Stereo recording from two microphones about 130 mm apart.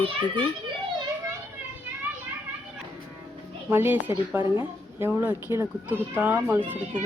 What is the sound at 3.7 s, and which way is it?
Speech, 15° right (ahead or behind).